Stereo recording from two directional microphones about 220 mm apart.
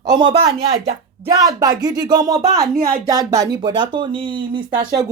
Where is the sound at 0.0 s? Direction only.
20° right (ahead or behind).